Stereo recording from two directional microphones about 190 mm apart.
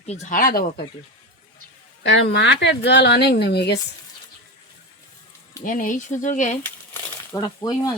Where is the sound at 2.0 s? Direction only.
65° left (ahead or behind).